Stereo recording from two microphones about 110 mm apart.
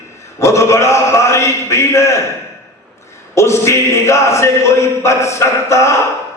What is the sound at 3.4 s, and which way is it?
A man's voice, 25° left (ahead or behind).